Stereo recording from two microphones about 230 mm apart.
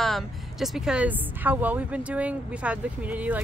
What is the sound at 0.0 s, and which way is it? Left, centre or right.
Speech, centre.